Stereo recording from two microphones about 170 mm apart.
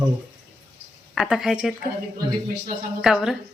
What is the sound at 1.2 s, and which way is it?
Speech, centre (ahead or behind).